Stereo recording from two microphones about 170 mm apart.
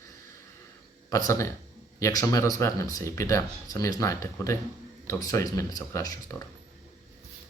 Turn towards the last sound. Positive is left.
turn(degrees=20)  # may be behind; listen again after turning